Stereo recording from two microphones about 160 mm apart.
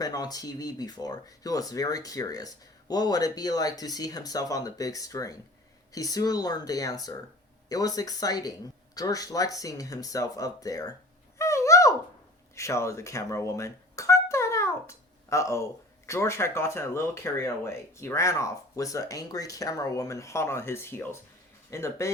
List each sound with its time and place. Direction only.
0.0 s speech: 25° left (ahead or behind)
11.3 s a sound: 20° left (ahead or behind)
12.5 s music: 20° left (ahead or behind)
16.0 s speech: 15° left (ahead or behind)